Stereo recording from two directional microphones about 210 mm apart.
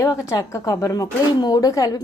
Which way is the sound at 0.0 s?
15° left (ahead or behind).